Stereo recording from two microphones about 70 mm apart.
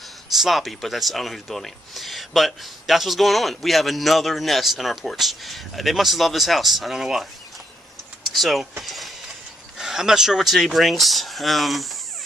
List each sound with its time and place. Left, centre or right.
0.4 s speech: centre
8.3 s speech: centre